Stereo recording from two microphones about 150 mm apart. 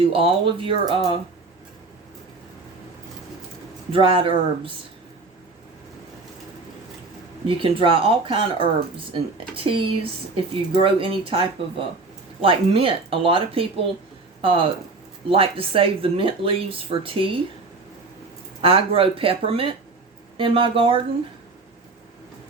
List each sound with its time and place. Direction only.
0.0 s speech: 40° right (ahead or behind)
3.9 s speech: 40° right (ahead or behind)
7.4 s speech: 35° right (ahead or behind)
18.6 s speech: 40° right (ahead or behind)